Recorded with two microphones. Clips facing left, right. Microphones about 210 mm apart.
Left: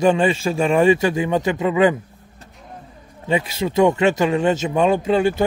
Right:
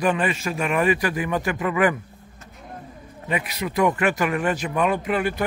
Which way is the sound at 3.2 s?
30° left (ahead or behind).